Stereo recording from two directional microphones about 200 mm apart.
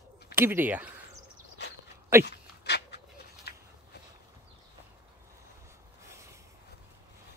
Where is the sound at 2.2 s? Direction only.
55° left (ahead or behind).